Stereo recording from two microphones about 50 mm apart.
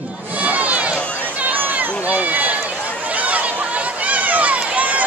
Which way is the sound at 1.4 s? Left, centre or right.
Right.